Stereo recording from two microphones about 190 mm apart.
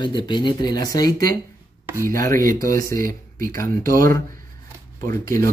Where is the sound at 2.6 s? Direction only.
15° left (ahead or behind).